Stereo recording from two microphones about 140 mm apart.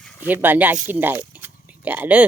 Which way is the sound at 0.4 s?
15° right (ahead or behind).